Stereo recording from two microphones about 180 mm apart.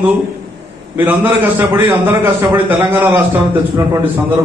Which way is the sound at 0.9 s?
10° right (ahead or behind).